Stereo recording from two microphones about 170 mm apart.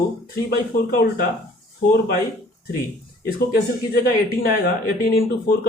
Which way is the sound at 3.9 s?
60° left (ahead or behind).